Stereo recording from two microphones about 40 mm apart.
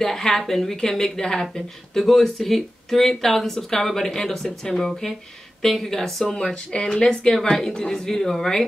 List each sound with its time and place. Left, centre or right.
0.0 s speech: centre
6.5 s speech: left